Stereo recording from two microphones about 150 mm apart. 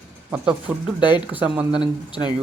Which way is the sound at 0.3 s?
10° right (ahead or behind).